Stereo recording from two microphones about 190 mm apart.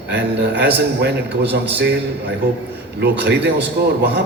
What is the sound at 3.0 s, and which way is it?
Speech, 60° right (ahead or behind).